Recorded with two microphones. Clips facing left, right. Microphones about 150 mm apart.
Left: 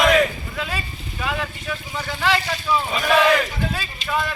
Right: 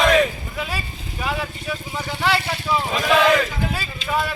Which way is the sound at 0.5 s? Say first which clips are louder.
Even; 10° right (ahead or behind).